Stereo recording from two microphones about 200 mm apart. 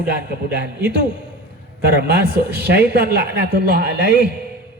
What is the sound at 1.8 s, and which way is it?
Speech, 55° right (ahead or behind).